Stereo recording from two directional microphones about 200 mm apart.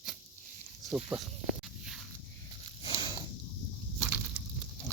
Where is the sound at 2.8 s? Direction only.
25° left (ahead or behind).